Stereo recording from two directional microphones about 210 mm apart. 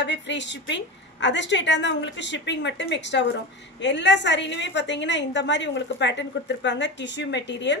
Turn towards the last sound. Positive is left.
turn(degrees=55)  # may be behind; listen again after turning